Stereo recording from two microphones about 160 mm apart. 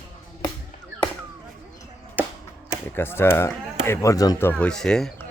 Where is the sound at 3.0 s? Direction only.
15° left (ahead or behind).